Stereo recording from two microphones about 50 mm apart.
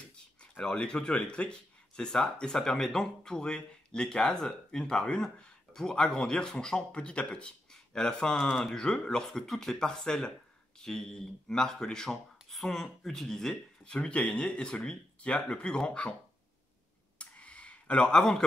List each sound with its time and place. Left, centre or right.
0.6 s speech: centre
13.9 s speech: left
17.2 s a sound: left